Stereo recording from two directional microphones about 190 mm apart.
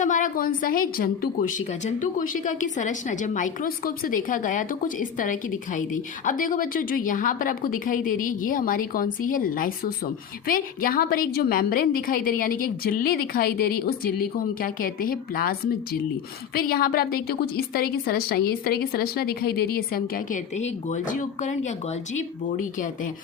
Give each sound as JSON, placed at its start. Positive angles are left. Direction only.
{"t": 0.0, "sound": "a woman's voice", "side_deg": 45}